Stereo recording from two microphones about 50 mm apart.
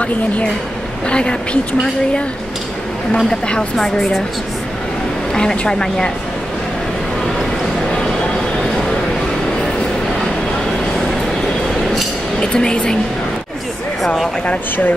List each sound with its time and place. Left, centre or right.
1.0 s a woman's voice: left
3.1 s a woman's voice: centre
5.3 s a woman's voice: centre
12.4 s a woman's voice: centre
14.0 s speech: centre